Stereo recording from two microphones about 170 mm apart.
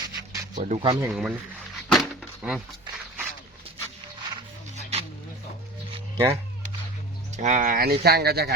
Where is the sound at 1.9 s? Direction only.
Centre (ahead or behind).